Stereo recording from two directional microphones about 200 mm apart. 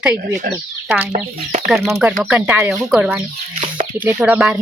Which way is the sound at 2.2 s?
10° right (ahead or behind).